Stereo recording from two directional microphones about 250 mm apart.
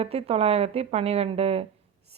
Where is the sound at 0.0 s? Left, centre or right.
Right.